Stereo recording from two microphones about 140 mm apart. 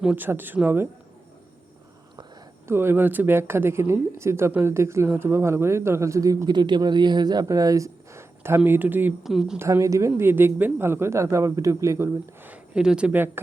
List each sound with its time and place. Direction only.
0.0 s speech: 10° right (ahead or behind)
2.6 s speech: 15° right (ahead or behind)
9.2 s speech: centre (ahead or behind)
9.6 s speech: 20° right (ahead or behind)